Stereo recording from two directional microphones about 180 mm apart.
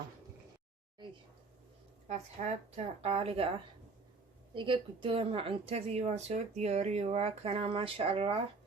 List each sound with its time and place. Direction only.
2.0 s speech: 40° right (ahead or behind)
4.5 s speech: 25° right (ahead or behind)